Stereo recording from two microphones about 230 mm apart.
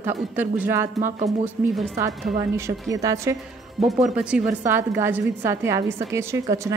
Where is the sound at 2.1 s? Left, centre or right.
Centre.